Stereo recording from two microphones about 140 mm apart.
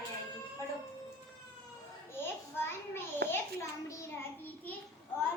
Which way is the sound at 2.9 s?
15° left (ahead or behind).